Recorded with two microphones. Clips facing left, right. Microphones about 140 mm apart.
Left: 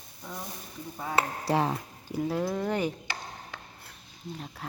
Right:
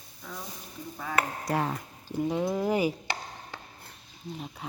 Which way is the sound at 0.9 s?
30° left (ahead or behind).